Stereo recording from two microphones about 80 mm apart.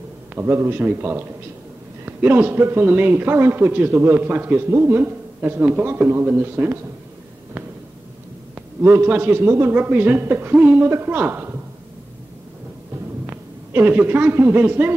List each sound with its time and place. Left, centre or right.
0.3 s a man's voice: right
8.8 s a man's voice: right
10.9 s a woman's voice: right
13.3 s speech: right